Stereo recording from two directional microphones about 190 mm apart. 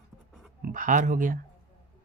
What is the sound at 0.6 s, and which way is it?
Speech, 40° right (ahead or behind).